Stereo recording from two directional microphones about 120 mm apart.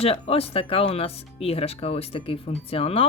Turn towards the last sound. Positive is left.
turn(degrees=55)  # may be behind; listen again after turning